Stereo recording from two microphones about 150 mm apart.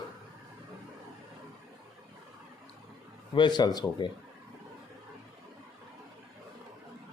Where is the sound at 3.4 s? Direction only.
30° left (ahead or behind).